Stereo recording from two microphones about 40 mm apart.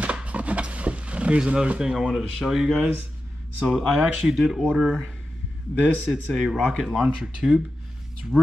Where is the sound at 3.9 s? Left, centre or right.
Right.